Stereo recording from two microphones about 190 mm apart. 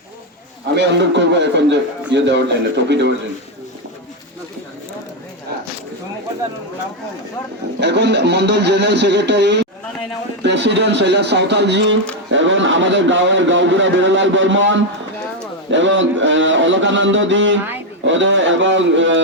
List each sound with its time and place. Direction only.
0.8 s a man's voice: 65° right (ahead or behind)
7.8 s a man's voice: 65° right (ahead or behind)
12.3 s a man's voice: 80° right